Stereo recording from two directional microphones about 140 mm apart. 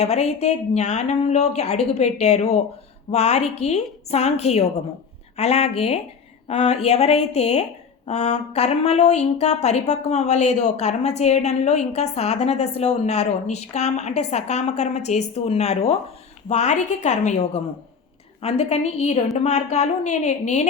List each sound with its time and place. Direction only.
0.0 s a woman's voice: 50° left (ahead or behind)